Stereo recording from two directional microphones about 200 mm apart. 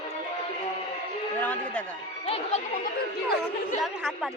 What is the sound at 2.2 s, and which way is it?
Music, 30° left (ahead or behind).